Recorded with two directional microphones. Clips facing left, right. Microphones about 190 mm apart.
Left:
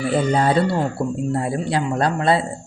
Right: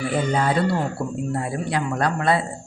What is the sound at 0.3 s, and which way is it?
Speech, 30° left (ahead or behind).